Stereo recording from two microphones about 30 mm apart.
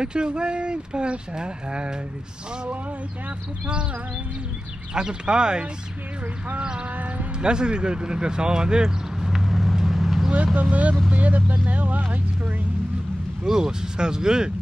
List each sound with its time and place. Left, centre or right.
0.0 s speech: right
4.9 s speech: right
7.3 s speech: right
8.8 s vehicle: centre
10.3 s speech: right
13.4 s speech: right